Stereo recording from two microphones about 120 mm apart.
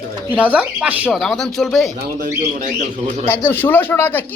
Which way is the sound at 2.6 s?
80° right.